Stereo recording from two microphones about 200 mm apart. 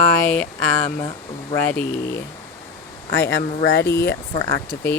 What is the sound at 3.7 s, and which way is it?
Speech, 60° left (ahead or behind).